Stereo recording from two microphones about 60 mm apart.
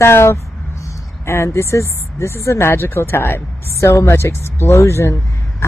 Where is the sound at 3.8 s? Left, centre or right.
Left.